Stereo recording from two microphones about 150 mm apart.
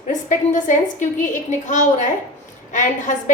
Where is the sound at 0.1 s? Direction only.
55° left (ahead or behind).